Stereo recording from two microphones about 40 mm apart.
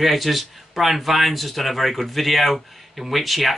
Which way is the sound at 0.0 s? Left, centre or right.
Centre.